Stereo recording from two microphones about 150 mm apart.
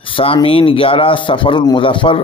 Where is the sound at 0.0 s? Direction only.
35° left (ahead or behind).